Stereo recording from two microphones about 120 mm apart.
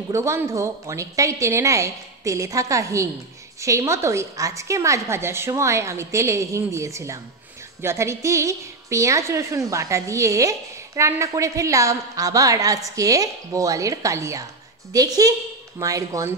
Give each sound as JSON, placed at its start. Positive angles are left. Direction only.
{"t": 0.1, "sound": "a woman's voice", "side_deg": -25}